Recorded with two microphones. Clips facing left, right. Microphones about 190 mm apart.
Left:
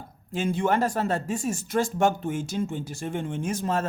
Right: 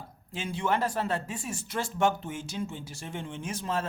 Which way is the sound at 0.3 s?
45° left (ahead or behind).